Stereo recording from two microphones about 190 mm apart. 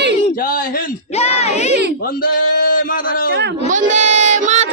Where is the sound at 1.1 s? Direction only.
35° left (ahead or behind).